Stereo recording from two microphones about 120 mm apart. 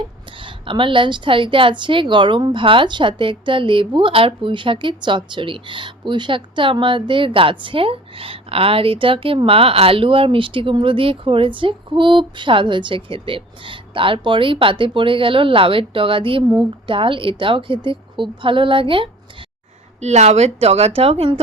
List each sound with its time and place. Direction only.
0.4 s a woman's voice: 45° right (ahead or behind)
20.0 s a woman's voice: 65° right (ahead or behind)